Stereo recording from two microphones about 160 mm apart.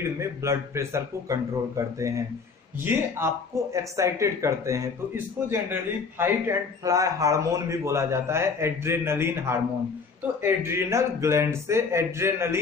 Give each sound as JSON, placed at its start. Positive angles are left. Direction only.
{"t": 0.0, "sound": "a man's voice", "side_deg": -20}